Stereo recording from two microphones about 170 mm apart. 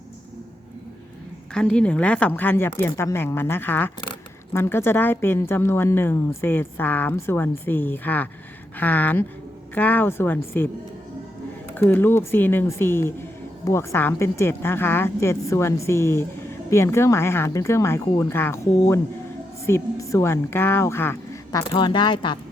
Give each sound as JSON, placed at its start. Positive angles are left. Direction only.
{"t": 1.5, "sound": "a woman's voice", "side_deg": 5}
{"t": 11.7, "sound": "a woman's voice", "side_deg": 10}